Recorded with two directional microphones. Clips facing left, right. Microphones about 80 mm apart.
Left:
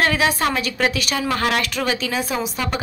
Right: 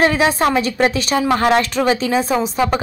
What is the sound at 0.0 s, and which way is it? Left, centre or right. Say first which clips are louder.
A woman's voice: right 4 dB; right.